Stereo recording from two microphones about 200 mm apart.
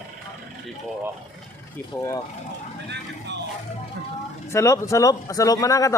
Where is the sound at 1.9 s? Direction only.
15° left (ahead or behind).